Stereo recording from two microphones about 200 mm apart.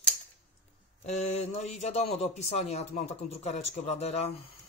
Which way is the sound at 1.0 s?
35° left (ahead or behind).